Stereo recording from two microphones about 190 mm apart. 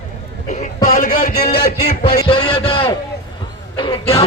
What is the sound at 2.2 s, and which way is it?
A man's voice, 25° left (ahead or behind).